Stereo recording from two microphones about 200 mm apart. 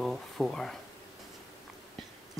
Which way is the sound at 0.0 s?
Centre (ahead or behind).